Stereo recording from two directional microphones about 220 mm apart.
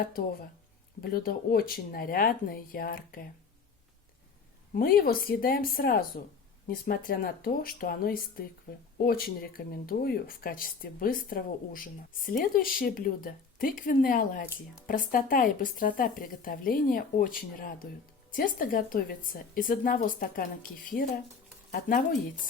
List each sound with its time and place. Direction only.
0.0 s speech: 40° left (ahead or behind)
4.7 s speech: 40° left (ahead or behind)